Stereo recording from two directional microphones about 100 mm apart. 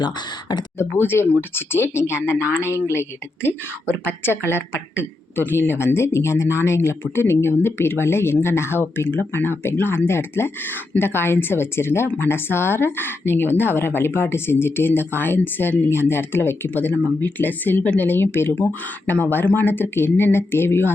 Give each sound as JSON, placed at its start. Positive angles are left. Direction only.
{"t": 0.0, "sound": "speech", "side_deg": 45}
{"t": 0.9, "sound": "speech", "side_deg": 20}